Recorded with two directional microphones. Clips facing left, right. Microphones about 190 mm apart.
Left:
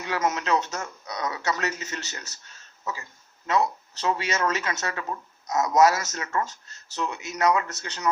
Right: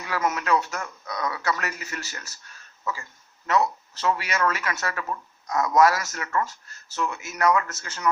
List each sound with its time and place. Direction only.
0.0 s speech: 25° left (ahead or behind)
3.4 s speech: 20° left (ahead or behind)